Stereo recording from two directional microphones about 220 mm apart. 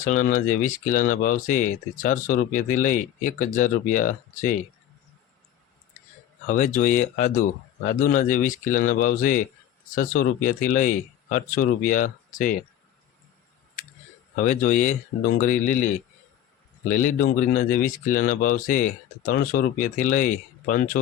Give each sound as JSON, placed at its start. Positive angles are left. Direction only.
{"t": 0.0, "sound": "speech", "side_deg": 35}
{"t": 6.5, "sound": "speech", "side_deg": 35}
{"t": 14.3, "sound": "speech", "side_deg": 35}
{"t": 16.9, "sound": "speech", "side_deg": 35}